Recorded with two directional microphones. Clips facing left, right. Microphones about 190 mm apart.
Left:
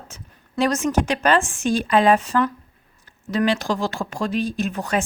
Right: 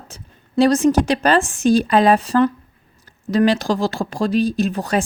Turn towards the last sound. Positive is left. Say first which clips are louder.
# right 4 dB
turn(degrees=-35)  # may be behind; listen again after turning